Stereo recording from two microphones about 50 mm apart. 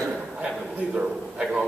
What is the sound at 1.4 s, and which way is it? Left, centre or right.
Speech, centre.